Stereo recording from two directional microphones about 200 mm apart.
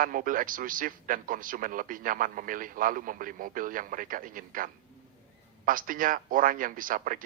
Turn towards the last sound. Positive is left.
turn(degrees=-45)  # may be behind; listen again after turning